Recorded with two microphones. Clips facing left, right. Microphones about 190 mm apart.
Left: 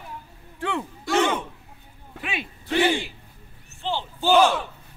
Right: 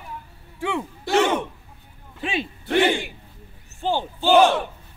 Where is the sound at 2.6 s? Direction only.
60° right (ahead or behind).